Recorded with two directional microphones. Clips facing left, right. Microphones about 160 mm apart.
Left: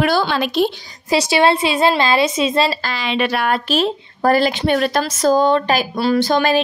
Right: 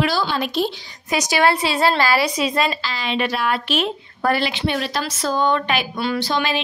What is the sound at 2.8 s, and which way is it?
Speech, 75° left (ahead or behind).